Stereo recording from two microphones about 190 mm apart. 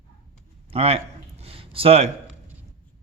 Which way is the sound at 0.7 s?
30° right (ahead or behind).